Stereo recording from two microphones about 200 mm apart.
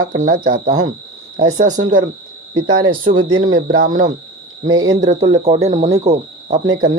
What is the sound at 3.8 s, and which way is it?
Speech, 40° right (ahead or behind).